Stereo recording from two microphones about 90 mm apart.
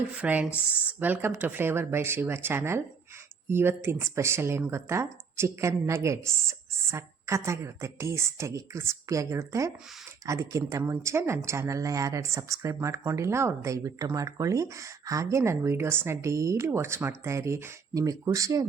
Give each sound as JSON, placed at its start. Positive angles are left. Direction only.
{"t": 0.2, "sound": "speech", "side_deg": -15}